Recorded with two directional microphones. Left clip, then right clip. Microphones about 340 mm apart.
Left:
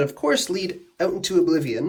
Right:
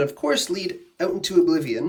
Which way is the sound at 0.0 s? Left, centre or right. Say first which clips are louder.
Left 1 dB; centre.